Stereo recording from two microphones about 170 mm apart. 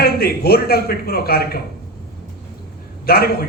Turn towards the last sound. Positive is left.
turn(degrees=65)  # may be behind; listen again after turning